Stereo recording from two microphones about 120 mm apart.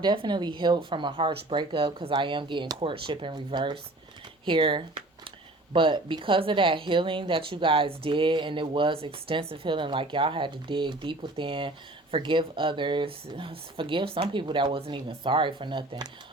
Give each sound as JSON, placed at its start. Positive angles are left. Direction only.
{"t": 0.0, "sound": "a woman's voice", "side_deg": -40}